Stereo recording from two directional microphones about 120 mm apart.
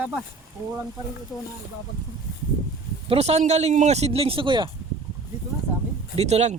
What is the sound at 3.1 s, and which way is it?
Speech, 60° right (ahead or behind).